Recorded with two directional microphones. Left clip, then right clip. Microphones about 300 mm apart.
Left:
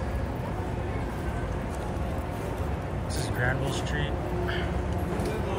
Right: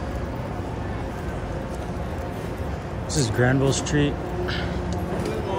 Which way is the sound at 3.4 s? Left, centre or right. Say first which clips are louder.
Right 7 dB; centre.